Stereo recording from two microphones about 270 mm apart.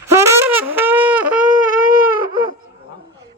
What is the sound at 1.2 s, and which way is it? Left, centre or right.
Shofar, right.